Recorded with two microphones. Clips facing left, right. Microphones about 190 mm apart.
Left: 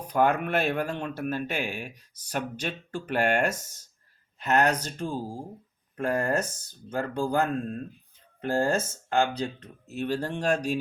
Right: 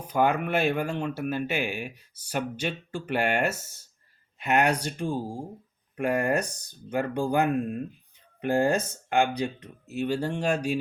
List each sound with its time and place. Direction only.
0.1 s speech: 10° right (ahead or behind)